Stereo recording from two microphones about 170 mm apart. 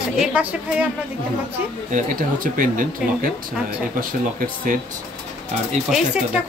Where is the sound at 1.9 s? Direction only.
55° right (ahead or behind).